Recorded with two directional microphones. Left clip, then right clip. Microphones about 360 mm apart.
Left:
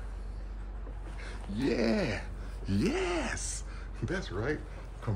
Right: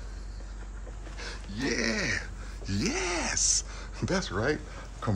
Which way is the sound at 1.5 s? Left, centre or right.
Centre.